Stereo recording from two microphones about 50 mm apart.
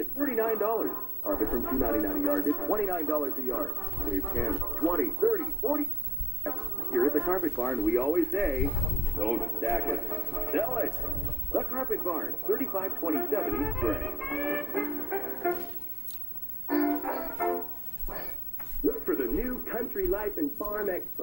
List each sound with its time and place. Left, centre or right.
0.2 s a man's voice: centre
6.8 s speech: centre
10.0 s speech: centre
10.3 s speech: centre
16.6 s music: centre
18.9 s radio: centre